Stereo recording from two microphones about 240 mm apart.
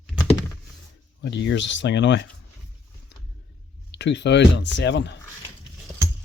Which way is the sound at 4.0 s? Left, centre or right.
Left.